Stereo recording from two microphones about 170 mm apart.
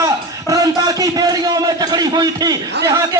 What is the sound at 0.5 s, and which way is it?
A man's voice, 20° right (ahead or behind).